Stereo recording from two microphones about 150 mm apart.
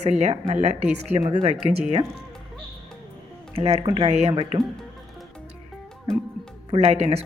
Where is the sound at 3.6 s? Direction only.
40° right (ahead or behind).